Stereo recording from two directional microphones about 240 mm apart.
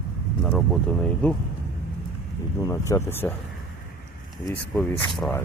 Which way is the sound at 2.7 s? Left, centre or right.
Centre.